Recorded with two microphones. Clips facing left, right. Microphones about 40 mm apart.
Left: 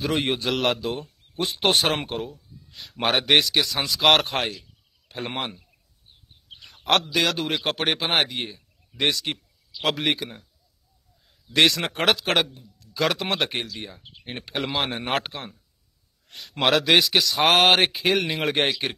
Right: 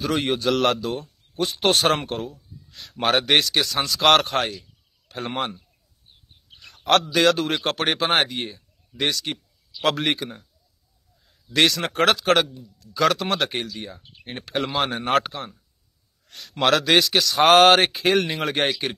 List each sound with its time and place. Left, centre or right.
0.0 s a man's voice: centre
5.1 s a sound: left
6.6 s a man's voice: centre
9.8 s speech: centre
11.5 s speech: centre
16.6 s speech: centre